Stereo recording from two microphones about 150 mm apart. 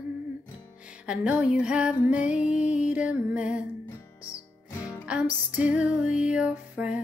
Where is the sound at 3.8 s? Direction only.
20° left (ahead or behind).